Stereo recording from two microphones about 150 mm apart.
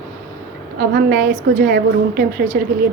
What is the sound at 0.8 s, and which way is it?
Speech, 75° right (ahead or behind).